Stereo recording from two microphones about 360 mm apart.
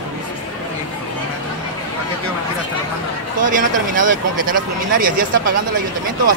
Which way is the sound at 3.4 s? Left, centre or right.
Right.